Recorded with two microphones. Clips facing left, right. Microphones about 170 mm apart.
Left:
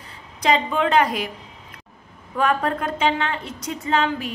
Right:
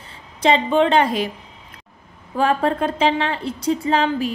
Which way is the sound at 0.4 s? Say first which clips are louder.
Right 4 dB; 30° right (ahead or behind).